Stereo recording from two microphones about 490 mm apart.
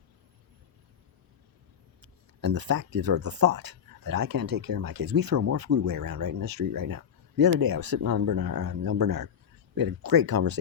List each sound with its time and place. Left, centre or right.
2.0 s speech: right